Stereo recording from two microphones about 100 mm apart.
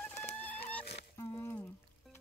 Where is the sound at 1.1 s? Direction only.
35° left (ahead or behind).